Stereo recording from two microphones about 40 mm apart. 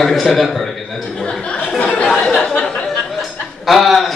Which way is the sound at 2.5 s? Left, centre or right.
Left.